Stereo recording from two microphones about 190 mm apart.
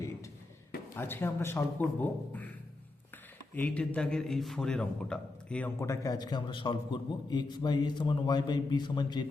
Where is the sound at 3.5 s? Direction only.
5° left (ahead or behind).